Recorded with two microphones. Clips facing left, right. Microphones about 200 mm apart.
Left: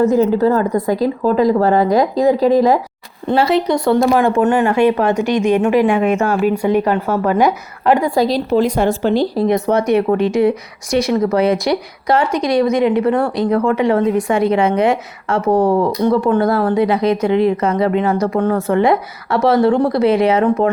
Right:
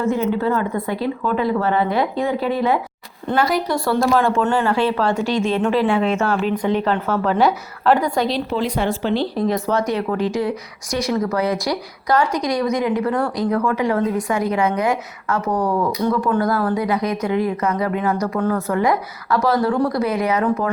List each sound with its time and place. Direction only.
0.0 s speech: 40° left (ahead or behind)
3.3 s speech: 25° left (ahead or behind)
8.1 s a woman's voice: 35° left (ahead or behind)
9.5 s speech: 20° left (ahead or behind)